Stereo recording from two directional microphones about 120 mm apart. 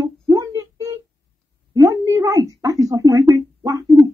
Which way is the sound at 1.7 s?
25° right (ahead or behind).